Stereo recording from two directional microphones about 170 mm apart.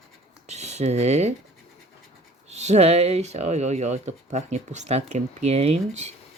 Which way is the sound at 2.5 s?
40° right (ahead or behind).